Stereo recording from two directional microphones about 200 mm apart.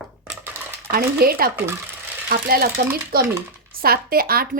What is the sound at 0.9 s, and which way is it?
A woman's voice, 50° right (ahead or behind).